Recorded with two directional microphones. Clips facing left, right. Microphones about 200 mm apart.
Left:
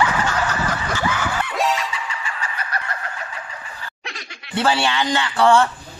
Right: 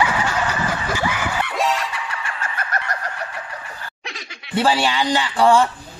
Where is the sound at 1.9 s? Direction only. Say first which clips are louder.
Even; 60° right (ahead or behind).